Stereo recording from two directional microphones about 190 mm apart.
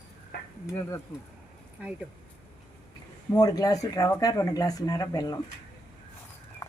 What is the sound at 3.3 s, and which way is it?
Speech, 20° left (ahead or behind).